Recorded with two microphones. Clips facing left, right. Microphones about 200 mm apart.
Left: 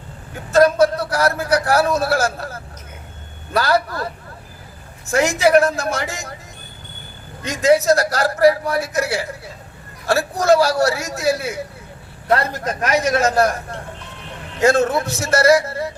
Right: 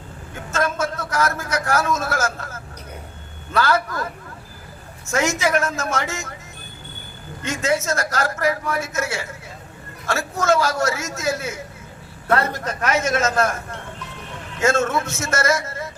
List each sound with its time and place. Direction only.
0.5 s a man's voice: 35° left (ahead or behind)
7.4 s a man's voice: 35° left (ahead or behind)